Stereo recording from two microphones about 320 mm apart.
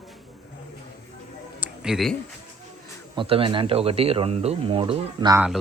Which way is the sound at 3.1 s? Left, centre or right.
Centre.